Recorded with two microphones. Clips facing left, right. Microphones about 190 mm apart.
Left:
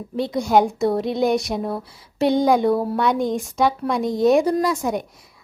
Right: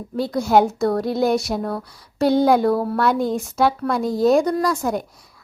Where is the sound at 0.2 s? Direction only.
5° right (ahead or behind).